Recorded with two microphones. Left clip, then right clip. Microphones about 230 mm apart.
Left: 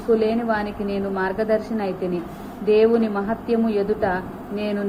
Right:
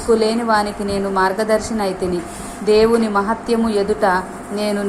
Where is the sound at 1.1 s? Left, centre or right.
Right.